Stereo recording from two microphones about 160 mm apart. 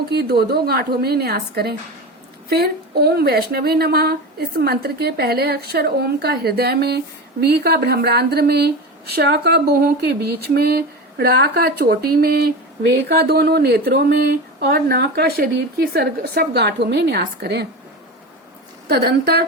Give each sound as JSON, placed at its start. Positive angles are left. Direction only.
{"t": 0.1, "sound": "a woman's voice", "side_deg": -80}
{"t": 13.1, "sound": "speech", "side_deg": -85}
{"t": 18.9, "sound": "speech", "side_deg": -80}